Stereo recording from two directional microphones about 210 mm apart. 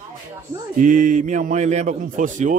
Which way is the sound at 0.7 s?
40° right (ahead or behind).